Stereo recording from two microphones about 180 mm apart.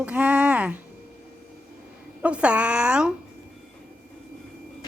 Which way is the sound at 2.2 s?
5° right (ahead or behind).